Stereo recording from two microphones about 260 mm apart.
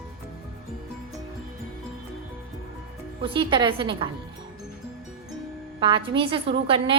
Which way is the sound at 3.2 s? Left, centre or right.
Centre.